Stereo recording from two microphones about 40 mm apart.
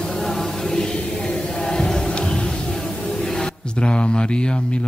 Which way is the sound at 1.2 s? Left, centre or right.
Centre.